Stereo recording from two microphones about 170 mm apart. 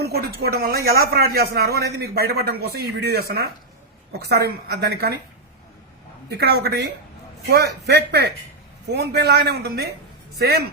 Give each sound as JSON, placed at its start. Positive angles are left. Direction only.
{"t": 0.0, "sound": "a man's voice", "side_deg": -70}
{"t": 6.3, "sound": "a man's voice", "side_deg": -70}